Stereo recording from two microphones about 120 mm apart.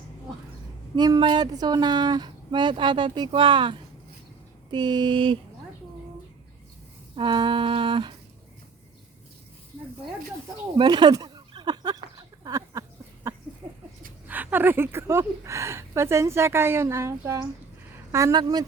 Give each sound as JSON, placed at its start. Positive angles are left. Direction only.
{"t": 0.9, "sound": "speech", "side_deg": -35}
{"t": 7.2, "sound": "humming", "side_deg": -45}
{"t": 10.8, "sound": "a sound", "side_deg": -40}
{"t": 14.3, "sound": "speech", "side_deg": -15}